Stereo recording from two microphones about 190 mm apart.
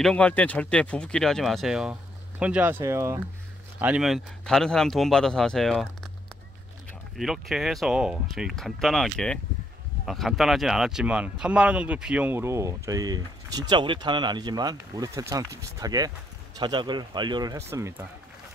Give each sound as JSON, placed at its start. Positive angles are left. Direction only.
{"t": 0.0, "sound": "speech", "side_deg": 5}
{"t": 3.8, "sound": "speech", "side_deg": -5}
{"t": 6.9, "sound": "a man's voice", "side_deg": 0}